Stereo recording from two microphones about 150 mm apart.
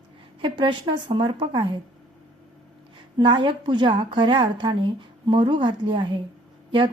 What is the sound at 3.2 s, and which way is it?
A woman's voice, 35° right (ahead or behind).